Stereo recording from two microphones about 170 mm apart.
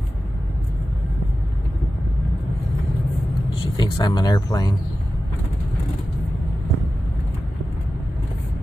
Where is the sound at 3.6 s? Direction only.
25° left (ahead or behind).